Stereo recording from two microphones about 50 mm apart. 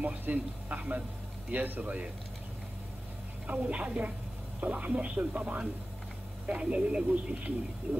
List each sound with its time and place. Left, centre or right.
0.0 s speech: right
3.4 s speech: right
7.9 s a sound: right